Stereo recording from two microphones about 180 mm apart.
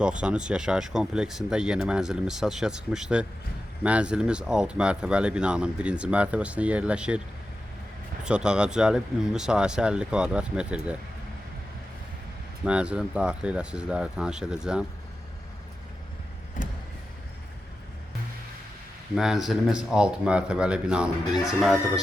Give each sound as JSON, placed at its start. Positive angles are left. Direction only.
{"t": 0.0, "sound": "speech", "side_deg": -5}
{"t": 8.2, "sound": "speech", "side_deg": -5}
{"t": 12.6, "sound": "speech", "side_deg": -5}
{"t": 16.6, "sound": "vehicle", "side_deg": 45}
{"t": 19.1, "sound": "speech", "side_deg": 0}